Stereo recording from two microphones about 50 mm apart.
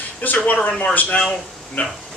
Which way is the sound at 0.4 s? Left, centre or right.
Left.